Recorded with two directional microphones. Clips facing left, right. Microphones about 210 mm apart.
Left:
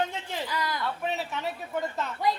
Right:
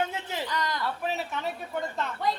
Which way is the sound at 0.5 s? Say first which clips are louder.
Even; 10° left (ahead or behind).